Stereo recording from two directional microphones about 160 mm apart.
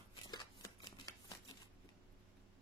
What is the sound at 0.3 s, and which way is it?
Shuffling cards, 25° left (ahead or behind).